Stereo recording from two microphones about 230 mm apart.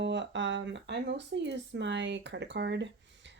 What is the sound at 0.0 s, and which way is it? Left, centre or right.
Speech, right.